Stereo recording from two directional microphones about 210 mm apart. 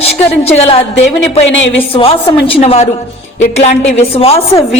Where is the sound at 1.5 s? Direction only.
60° left (ahead or behind).